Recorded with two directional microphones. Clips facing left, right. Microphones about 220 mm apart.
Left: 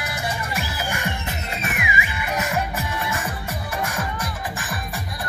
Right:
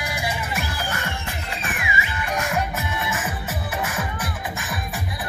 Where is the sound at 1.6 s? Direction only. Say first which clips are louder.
Left 3 dB; 20° left (ahead or behind).